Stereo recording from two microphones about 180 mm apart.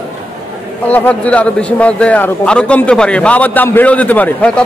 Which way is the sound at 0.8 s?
10° left (ahead or behind).